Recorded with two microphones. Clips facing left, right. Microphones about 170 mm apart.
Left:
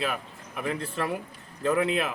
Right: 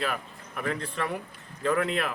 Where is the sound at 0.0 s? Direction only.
5° left (ahead or behind).